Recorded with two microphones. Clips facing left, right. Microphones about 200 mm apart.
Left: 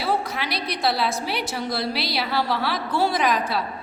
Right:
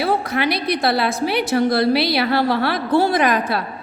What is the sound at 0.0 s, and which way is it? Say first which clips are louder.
A woman's voice: right 6 dB; 55° right (ahead or behind).